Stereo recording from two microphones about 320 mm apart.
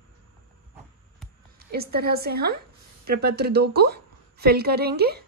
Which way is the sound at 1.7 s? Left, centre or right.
Right.